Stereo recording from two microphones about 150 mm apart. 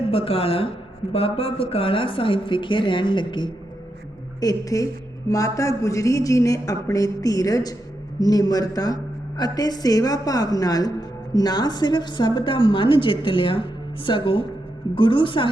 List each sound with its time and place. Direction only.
0.1 s a woman's voice: 40° left (ahead or behind)